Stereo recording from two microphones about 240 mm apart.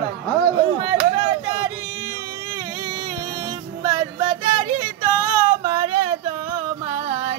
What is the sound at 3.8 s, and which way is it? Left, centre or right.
Music, centre.